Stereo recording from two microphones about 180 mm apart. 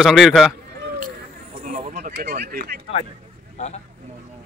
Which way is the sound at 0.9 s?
50° right (ahead or behind).